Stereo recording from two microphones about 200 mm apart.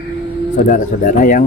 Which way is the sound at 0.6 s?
40° left (ahead or behind).